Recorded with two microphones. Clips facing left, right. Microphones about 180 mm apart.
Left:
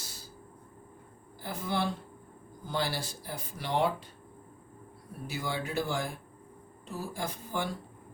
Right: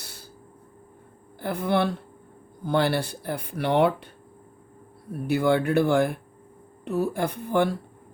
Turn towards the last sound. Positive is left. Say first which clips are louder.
# right 11 dB
turn(degrees=-60)  # may be behind; listen again after turning